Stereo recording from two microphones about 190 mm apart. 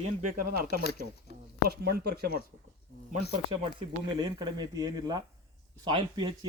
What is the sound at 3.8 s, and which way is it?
Speech, 25° right (ahead or behind).